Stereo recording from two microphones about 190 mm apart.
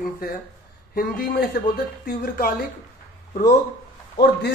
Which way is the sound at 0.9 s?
50° left (ahead or behind).